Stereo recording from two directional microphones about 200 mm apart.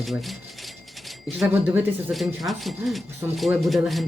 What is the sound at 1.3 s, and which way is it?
Speech, 5° right (ahead or behind).